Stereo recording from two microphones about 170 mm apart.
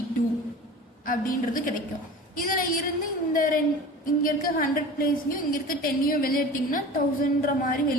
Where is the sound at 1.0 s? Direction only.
55° left (ahead or behind).